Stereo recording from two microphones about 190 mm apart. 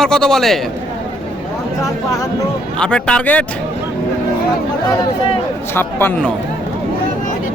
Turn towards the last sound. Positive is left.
turn(degrees=10)  # may be behind; listen again after turning